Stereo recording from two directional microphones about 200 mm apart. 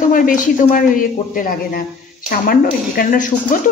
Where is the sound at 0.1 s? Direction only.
45° left (ahead or behind).